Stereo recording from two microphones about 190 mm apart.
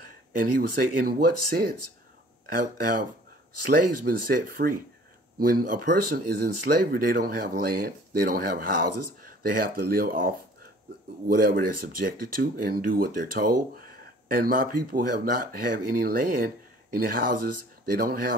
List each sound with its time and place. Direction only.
0.4 s speech: 50° right (ahead or behind)